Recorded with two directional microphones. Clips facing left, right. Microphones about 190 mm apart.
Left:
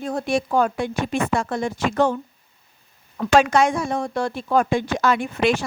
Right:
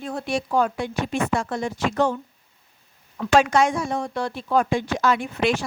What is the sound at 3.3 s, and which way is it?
Speech, 60° left (ahead or behind).